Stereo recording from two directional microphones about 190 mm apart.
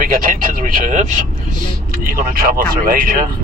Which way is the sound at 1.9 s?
50° right (ahead or behind).